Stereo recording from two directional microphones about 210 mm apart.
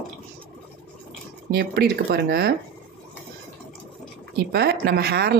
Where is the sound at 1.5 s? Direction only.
50° right (ahead or behind).